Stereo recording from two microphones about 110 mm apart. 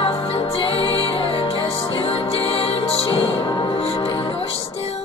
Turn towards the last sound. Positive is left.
turn(degrees=60)  # may be behind; listen again after turning